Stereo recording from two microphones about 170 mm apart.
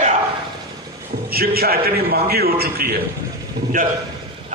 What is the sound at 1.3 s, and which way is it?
A man's voice, 60° right (ahead or behind).